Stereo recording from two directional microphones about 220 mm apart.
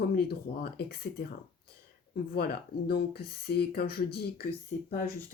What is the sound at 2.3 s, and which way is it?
Speech, 45° left (ahead or behind).